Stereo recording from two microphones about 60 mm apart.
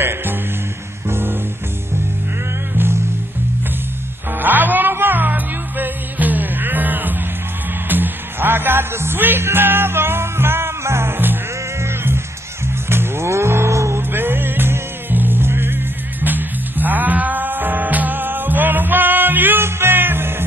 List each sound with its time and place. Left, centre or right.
0.0 s music: right
2.7 s music: right
4.4 s music: right
12.9 s cattle: right
14.1 s music: right